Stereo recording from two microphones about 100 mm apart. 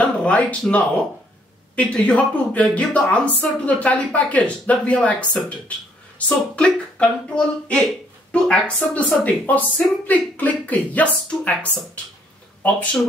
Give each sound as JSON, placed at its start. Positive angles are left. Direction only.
{"t": 0.0, "sound": "speech", "side_deg": 15}